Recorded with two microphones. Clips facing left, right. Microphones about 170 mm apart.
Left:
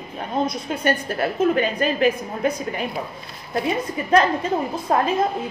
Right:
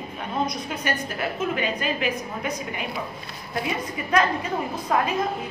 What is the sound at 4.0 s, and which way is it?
A woman's voice, 35° left (ahead or behind).